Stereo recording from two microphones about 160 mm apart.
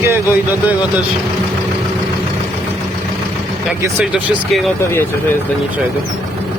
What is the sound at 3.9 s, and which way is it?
Speech, 5° right (ahead or behind).